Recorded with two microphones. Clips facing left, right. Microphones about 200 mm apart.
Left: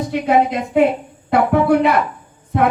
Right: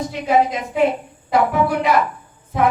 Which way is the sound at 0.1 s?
60° left (ahead or behind).